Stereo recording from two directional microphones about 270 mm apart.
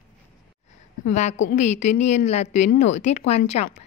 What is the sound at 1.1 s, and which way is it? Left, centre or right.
A woman's voice, left.